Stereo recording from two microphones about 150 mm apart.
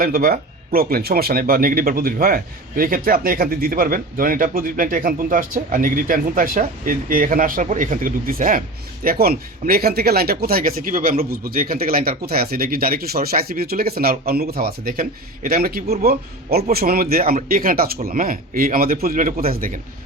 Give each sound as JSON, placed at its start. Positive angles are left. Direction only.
{"t": 0.0, "sound": "speech", "side_deg": -80}
{"t": 9.0, "sound": "speech", "side_deg": -90}
{"t": 16.7, "sound": "speech", "side_deg": -80}